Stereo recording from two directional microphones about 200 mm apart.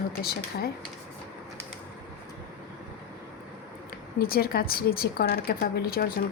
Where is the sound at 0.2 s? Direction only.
50° left (ahead or behind).